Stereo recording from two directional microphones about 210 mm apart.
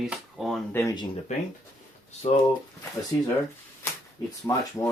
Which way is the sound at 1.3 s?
35° left (ahead or behind).